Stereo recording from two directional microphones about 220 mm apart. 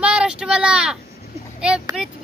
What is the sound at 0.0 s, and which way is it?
Vehicle, 5° right (ahead or behind).